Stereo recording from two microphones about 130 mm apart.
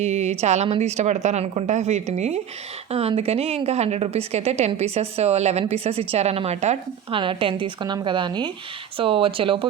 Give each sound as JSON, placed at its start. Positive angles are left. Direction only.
{"t": 0.0, "sound": "a woman's voice", "side_deg": -60}
{"t": 7.1, "sound": "a woman's voice", "side_deg": -40}